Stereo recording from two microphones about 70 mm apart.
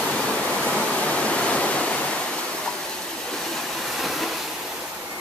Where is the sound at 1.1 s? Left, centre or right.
Centre.